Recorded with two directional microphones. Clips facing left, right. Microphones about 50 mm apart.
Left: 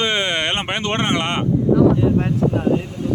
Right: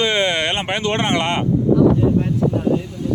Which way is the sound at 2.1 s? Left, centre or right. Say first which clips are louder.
Even; left.